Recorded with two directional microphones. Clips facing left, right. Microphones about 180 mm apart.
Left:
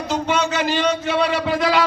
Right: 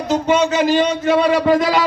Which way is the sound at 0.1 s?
45° right (ahead or behind).